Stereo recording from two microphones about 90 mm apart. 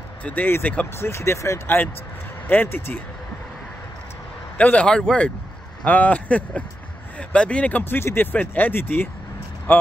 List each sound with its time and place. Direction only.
0.2 s speech: 20° left (ahead or behind)
0.9 s speech: 30° left (ahead or behind)
4.6 s a man's voice: 15° left (ahead or behind)